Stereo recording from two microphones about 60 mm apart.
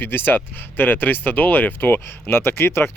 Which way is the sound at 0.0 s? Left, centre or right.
Left.